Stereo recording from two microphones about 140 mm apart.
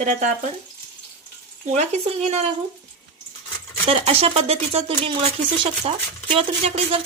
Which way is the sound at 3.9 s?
45° right (ahead or behind).